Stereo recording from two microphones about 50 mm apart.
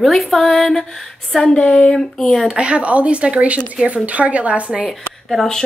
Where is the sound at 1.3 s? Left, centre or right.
Centre.